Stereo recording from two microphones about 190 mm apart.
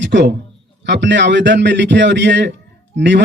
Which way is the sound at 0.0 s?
65° right (ahead or behind).